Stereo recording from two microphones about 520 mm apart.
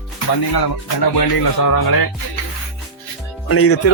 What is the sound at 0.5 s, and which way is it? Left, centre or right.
Speech, left.